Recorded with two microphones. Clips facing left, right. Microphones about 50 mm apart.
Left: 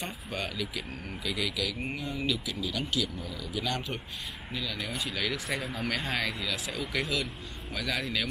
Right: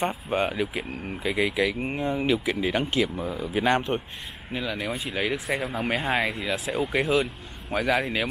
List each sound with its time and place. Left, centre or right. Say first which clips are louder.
0.3 s speech: right 7 dB; right